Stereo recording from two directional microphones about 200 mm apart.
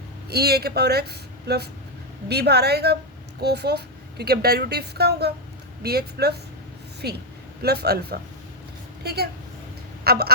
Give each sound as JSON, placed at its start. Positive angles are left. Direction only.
{"t": 0.3, "sound": "a woman's voice", "side_deg": -50}